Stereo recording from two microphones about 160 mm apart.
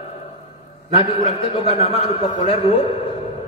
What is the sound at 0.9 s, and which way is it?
A man's voice, 35° left (ahead or behind).